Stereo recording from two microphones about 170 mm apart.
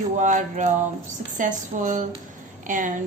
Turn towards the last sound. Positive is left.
turn(degrees=-50)  # may be behind; listen again after turning